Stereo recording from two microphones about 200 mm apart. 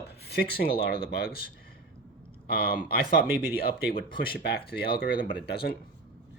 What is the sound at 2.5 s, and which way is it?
Speech, 50° left (ahead or behind).